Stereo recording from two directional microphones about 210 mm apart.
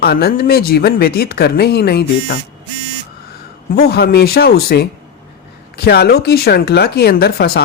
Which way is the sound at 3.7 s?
50° left (ahead or behind).